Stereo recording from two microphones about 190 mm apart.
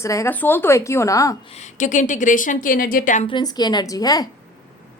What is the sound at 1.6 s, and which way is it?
A woman's voice, 40° left (ahead or behind).